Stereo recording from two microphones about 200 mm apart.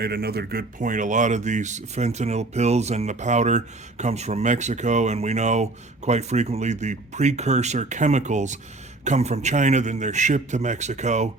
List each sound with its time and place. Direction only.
0.0 s speech: 55° right (ahead or behind); by 11.3 s 35° right (ahead or behind)